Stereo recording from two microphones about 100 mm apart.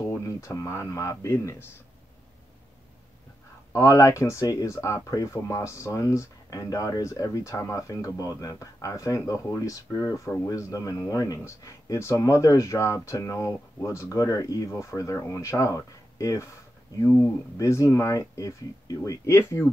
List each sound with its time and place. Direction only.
0.0 s speech: 30° left (ahead or behind)
3.7 s speech: 35° left (ahead or behind)
17.6 s speech: 30° left (ahead or behind)